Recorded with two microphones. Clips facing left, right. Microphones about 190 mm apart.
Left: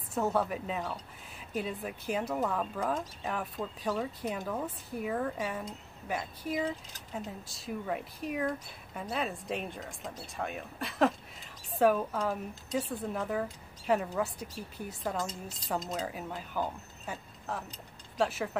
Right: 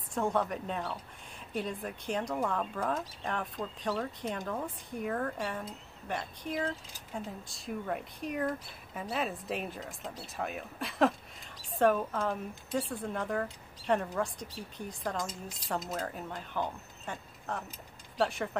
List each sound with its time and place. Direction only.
0.1 s speech: 5° left (ahead or behind)